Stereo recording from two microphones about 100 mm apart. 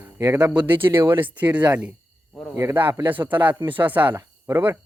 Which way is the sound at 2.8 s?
55° right (ahead or behind).